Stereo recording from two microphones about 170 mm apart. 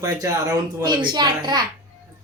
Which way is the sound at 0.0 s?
20° right (ahead or behind).